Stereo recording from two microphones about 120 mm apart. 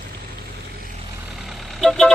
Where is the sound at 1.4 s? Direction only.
Centre (ahead or behind).